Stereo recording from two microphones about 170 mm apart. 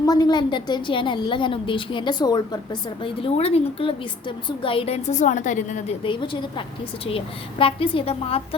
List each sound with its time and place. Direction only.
0.0 s a woman's voice: 20° left (ahead or behind); by 6.0 s 45° left (ahead or behind)
6.0 s a woman's voice: 30° left (ahead or behind)
7.6 s a woman's voice: 30° left (ahead or behind)